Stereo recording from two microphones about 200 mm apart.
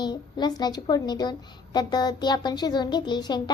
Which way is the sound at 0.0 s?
20° left (ahead or behind).